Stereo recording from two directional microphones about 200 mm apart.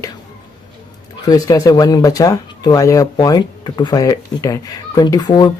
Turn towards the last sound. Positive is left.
turn(degrees=20)  # may be behind; listen again after turning